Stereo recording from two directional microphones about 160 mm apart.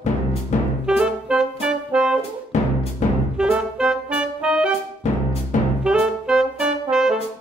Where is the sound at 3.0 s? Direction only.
45° left (ahead or behind).